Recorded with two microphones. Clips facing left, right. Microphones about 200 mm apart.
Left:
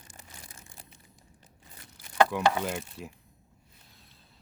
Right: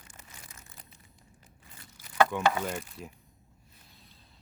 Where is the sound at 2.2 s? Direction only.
5° left (ahead or behind).